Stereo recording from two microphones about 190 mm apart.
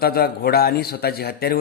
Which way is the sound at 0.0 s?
55° left (ahead or behind).